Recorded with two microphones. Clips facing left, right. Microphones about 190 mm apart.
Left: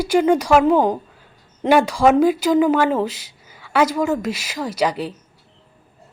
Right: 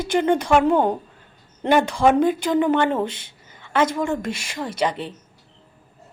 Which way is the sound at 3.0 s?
25° right (ahead or behind).